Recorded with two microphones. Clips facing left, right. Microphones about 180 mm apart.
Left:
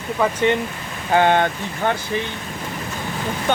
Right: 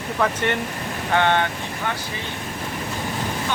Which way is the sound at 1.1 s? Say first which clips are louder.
Left 4 dB; 40° left (ahead or behind).